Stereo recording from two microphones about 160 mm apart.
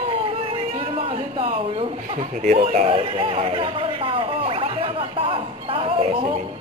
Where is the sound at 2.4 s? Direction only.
40° right (ahead or behind).